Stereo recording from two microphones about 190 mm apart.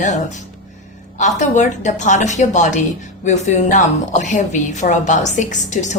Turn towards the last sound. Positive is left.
turn(degrees=40)  # may be behind; listen again after turning